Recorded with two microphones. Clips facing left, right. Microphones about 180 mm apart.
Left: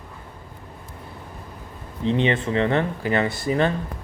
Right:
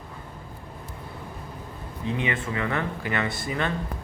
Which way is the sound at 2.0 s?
30° left (ahead or behind).